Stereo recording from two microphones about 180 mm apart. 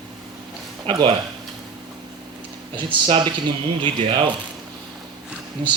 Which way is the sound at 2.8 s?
30° right (ahead or behind).